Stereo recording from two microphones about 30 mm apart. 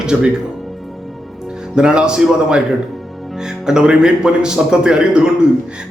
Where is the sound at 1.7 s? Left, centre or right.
Right.